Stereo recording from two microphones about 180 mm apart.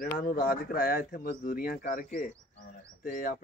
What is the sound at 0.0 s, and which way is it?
Speech, 50° left (ahead or behind).